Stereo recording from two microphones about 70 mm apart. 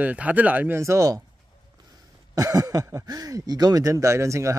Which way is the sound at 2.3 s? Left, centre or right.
Right.